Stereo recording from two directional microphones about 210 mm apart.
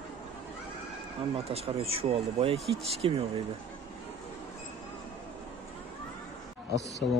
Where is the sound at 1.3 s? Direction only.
30° right (ahead or behind).